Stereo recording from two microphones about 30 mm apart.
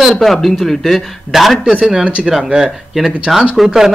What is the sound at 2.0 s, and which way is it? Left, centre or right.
Speech, right.